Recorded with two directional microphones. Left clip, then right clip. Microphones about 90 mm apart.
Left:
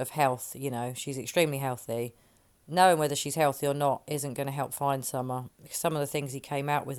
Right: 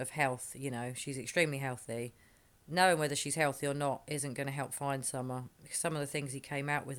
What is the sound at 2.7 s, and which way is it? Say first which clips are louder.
Speech: left 6 dB; 35° left (ahead or behind).